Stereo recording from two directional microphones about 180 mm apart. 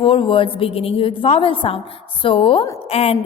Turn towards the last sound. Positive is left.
turn(degrees=35)  # may be behind; listen again after turning